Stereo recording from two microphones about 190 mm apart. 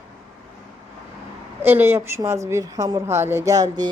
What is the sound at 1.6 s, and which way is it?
A woman's voice, 10° right (ahead or behind).